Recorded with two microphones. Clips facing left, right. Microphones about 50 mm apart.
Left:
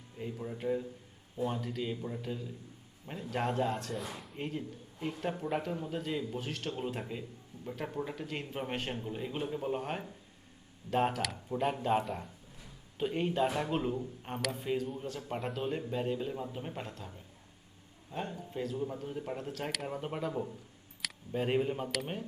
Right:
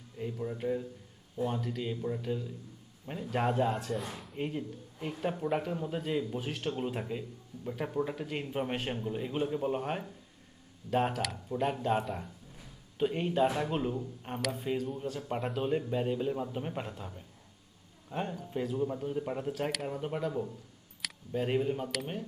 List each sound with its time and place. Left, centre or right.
0.2 s speech: centre
18.1 s speech: right
18.5 s speech: centre